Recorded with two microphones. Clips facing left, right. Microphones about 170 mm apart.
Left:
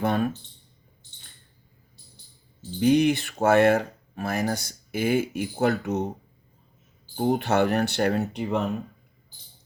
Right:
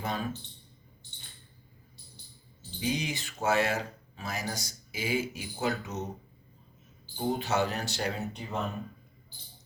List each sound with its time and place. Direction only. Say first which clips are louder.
0.0 s speech: left 10 dB; 60° left (ahead or behind)
2.8 s speech: left 13 dB; 60° left (ahead or behind)
7.2 s speech: left 7 dB; 60° left (ahead or behind)